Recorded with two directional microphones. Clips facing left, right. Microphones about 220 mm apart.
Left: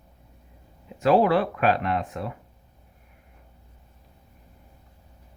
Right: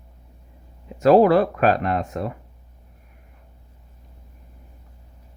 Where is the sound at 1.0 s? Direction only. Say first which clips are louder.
Right 5 dB; 40° right (ahead or behind).